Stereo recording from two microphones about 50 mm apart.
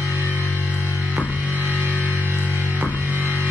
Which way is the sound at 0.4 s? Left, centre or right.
Left.